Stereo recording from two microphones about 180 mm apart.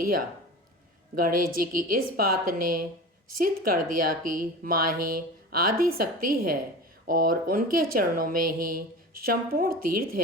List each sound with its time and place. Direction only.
1.2 s a woman's voice: 50° right (ahead or behind)